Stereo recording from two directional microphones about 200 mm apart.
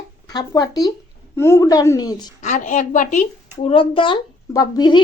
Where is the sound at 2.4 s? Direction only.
40° left (ahead or behind).